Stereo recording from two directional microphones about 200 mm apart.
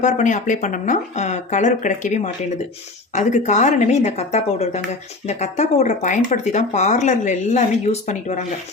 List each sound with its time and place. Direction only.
0.0 s speech: 40° left (ahead or behind)